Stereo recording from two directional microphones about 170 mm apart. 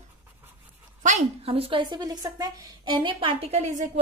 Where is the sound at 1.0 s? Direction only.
40° right (ahead or behind).